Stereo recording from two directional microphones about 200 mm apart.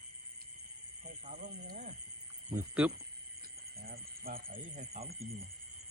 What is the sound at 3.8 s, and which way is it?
Alarm, 50° right (ahead or behind).